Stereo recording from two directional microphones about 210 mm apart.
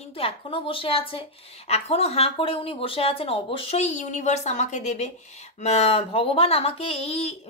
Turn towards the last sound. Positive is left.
turn(degrees=30)  # may be behind; listen again after turning